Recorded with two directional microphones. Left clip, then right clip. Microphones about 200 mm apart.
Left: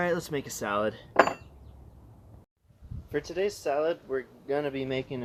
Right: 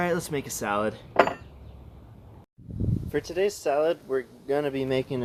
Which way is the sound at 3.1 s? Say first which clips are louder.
Right 3 dB; 5° right (ahead or behind).